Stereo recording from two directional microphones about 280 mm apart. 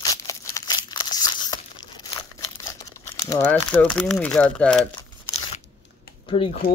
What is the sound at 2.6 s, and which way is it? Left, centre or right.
Speech, centre.